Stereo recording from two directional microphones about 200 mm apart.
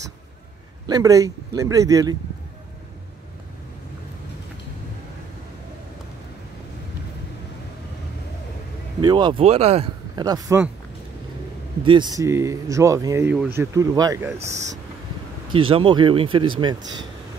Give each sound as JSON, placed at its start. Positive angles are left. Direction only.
{"t": 0.8, "sound": "speech", "side_deg": -20}
{"t": 9.0, "sound": "speech", "side_deg": -20}
{"t": 10.2, "sound": "speech", "side_deg": -20}
{"t": 11.8, "sound": "speech", "side_deg": -25}
{"t": 15.5, "sound": "speech", "side_deg": -25}